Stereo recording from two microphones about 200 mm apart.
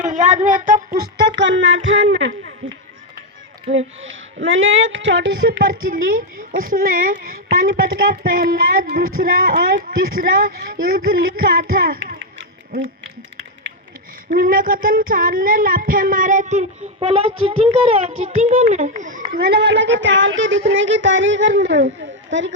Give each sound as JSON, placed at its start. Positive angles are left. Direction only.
{"t": 0.0, "sound": "speech", "side_deg": -40}
{"t": 1.4, "sound": "speech", "side_deg": -65}
{"t": 3.7, "sound": "speech", "side_deg": -75}
{"t": 5.5, "sound": "child singing", "side_deg": -45}
{"t": 14.3, "sound": "child singing", "side_deg": -45}
{"t": 20.7, "sound": "speech", "side_deg": -70}